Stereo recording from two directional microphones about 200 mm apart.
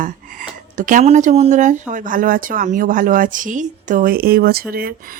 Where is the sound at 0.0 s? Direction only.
45° right (ahead or behind).